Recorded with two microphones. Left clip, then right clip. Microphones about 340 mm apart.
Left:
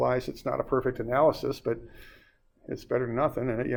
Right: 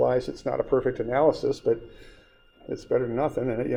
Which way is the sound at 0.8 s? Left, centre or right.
Left.